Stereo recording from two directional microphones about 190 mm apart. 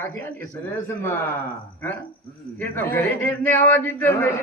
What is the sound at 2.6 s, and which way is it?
A man's voice, 10° left (ahead or behind).